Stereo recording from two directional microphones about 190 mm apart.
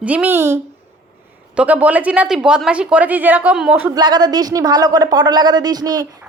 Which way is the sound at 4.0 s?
20° right (ahead or behind).